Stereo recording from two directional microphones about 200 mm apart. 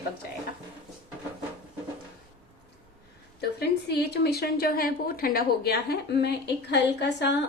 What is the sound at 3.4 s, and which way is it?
A woman's voice, 55° left (ahead or behind).